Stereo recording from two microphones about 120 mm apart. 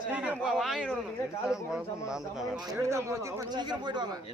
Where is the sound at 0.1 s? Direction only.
10° right (ahead or behind).